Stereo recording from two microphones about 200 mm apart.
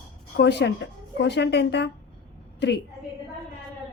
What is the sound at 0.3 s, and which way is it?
A woman's voice, 60° left (ahead or behind).